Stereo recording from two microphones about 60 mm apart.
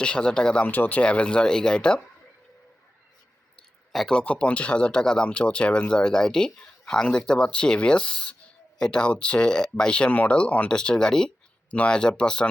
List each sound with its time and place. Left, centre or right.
0.0 s speech: centre
0.7 s speech: left; by 2.0 s centre
4.1 s speech: centre